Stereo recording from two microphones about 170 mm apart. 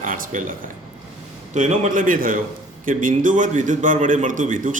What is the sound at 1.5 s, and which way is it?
A man's voice, 45° right (ahead or behind).